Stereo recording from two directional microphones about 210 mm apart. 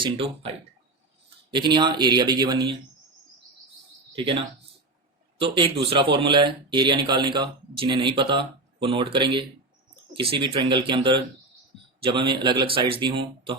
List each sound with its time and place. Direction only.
0.0 s speech: 25° right (ahead or behind)
4.1 s speech: 25° right (ahead or behind)